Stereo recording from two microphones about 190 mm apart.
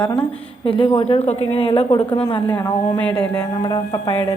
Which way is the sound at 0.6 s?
30° left (ahead or behind).